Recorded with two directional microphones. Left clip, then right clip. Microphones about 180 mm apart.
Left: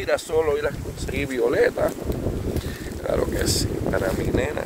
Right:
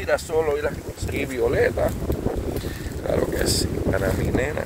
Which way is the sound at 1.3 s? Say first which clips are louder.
Left 1 dB; 25° left (ahead or behind).